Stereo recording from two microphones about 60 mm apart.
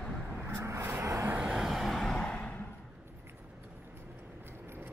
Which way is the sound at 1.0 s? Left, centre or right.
Right.